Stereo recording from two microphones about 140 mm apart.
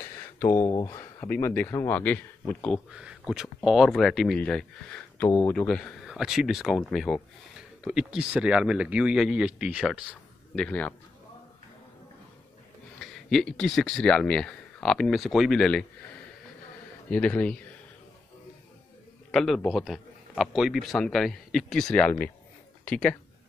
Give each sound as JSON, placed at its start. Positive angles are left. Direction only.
{"t": 0.0, "sound": "speech", "side_deg": 20}
{"t": 2.9, "sound": "a man's voice", "side_deg": -5}
{"t": 10.5, "sound": "speech", "side_deg": 10}
{"t": 13.0, "sound": "a man's voice", "side_deg": 5}
{"t": 17.1, "sound": "speech", "side_deg": 10}
{"t": 19.3, "sound": "a man's voice", "side_deg": 0}